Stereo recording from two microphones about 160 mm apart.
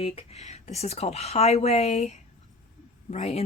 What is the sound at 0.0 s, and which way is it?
Speech, 40° left (ahead or behind).